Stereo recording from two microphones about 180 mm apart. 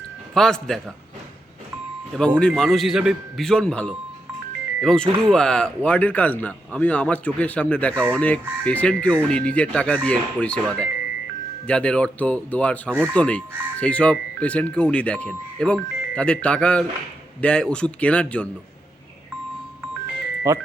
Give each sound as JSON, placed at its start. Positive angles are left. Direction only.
{"t": 0.3, "sound": "speech", "side_deg": 0}
{"t": 2.1, "sound": "speech", "side_deg": 0}
{"t": 20.5, "sound": "speech", "side_deg": -15}